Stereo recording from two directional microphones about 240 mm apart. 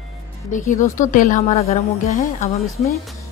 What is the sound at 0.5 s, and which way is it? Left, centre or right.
A woman's voice, left.